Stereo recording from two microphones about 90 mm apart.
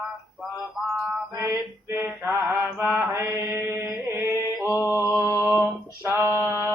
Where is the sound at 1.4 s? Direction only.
25° right (ahead or behind).